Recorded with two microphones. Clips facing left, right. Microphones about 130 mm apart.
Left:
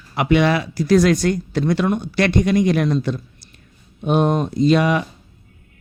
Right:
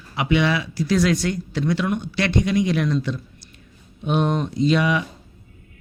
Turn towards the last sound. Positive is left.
turn(degrees=45)  # may be behind; listen again after turning